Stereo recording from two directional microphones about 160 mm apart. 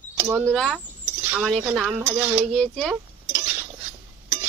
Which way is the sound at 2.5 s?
5° left (ahead or behind).